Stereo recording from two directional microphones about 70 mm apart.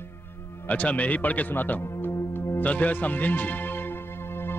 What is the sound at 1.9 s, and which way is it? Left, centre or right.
Music, left.